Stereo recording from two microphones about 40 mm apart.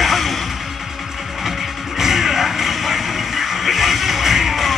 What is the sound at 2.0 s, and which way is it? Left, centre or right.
Music, centre.